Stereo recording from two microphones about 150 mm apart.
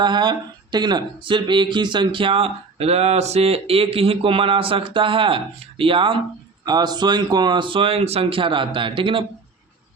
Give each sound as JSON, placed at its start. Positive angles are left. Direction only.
{"t": 0.0, "sound": "speech", "side_deg": -30}